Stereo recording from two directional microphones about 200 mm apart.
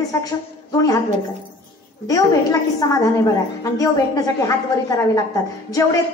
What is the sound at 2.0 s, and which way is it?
A woman's voice, 15° left (ahead or behind).